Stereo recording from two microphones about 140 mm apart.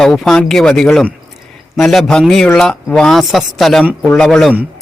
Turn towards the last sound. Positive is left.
turn(degrees=0)  # may be behind; listen again after turning